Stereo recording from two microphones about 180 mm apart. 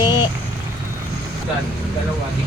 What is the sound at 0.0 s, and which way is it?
Vehicle, 25° left (ahead or behind).